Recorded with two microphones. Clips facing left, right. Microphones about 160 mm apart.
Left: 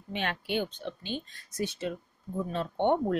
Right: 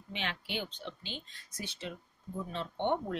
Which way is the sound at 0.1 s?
50° left (ahead or behind).